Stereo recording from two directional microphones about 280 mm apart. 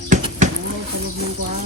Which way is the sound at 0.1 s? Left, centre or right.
Right.